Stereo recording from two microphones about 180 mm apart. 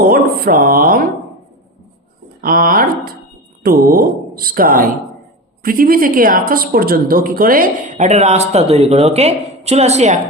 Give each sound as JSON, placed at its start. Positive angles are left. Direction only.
{"t": 0.0, "sound": "speech", "side_deg": -55}
{"t": 2.4, "sound": "a woman's voice", "side_deg": -55}